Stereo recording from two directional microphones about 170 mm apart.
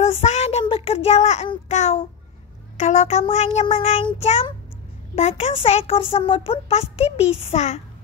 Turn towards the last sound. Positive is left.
turn(degrees=40)  # may be behind; listen again after turning